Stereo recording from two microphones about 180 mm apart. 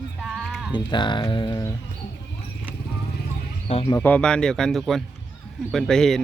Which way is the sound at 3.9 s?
10° left (ahead or behind).